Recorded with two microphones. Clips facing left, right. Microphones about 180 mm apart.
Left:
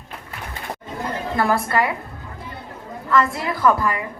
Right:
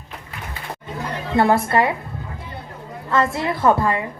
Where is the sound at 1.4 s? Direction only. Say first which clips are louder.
Right 4 dB; 25° right (ahead or behind).